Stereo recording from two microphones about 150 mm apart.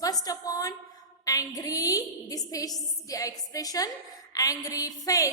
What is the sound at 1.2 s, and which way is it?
A woman's voice, 25° left (ahead or behind).